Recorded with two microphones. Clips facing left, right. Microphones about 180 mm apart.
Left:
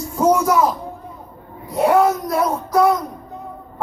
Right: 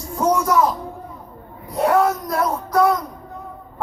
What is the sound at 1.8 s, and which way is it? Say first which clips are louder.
Child singing: left 2 dB; 5° left (ahead or behind).